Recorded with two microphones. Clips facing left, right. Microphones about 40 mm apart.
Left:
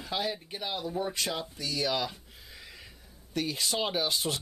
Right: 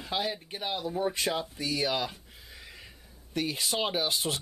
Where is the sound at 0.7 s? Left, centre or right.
Centre.